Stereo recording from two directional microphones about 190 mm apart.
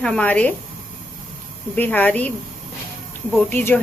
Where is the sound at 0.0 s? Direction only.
5° left (ahead or behind).